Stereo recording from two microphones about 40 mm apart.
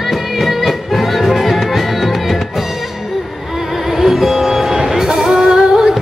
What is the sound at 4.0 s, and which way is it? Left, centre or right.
Music, centre.